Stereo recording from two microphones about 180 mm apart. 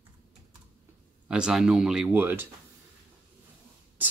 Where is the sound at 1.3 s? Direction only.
5° right (ahead or behind).